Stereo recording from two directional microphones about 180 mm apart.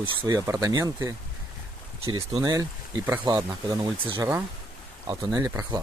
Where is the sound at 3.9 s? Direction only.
30° right (ahead or behind).